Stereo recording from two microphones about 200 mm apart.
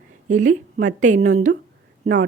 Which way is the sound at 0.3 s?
40° right (ahead or behind).